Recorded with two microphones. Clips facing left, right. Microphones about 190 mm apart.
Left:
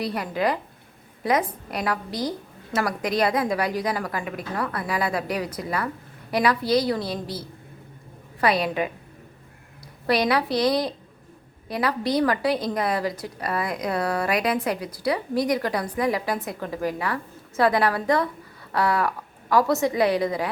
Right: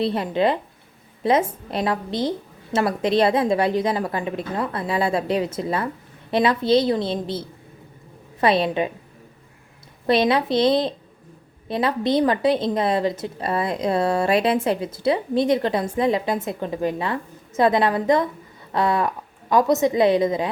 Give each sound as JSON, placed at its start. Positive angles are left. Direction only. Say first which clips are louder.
{"t": 0.0, "sound": "a woman's voice", "louder": "right 5 dB", "side_deg": -25}
{"t": 10.1, "sound": "a woman's voice", "louder": "right 3 dB", "side_deg": -25}